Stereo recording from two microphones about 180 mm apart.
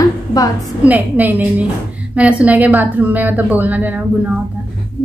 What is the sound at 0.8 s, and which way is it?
A woman's voice, 10° right (ahead or behind).